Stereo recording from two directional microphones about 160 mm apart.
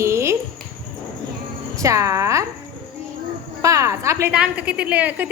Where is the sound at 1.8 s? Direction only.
20° right (ahead or behind).